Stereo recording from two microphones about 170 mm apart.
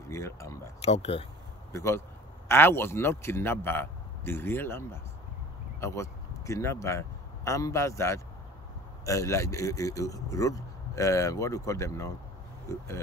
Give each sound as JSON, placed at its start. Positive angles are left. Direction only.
{"t": 0.1, "sound": "speech", "side_deg": 15}
{"t": 0.8, "sound": "speech", "side_deg": 35}
{"t": 1.7, "sound": "a man's voice", "side_deg": 15}